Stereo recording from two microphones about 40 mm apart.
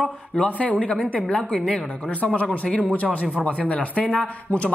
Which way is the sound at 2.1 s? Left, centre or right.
Left.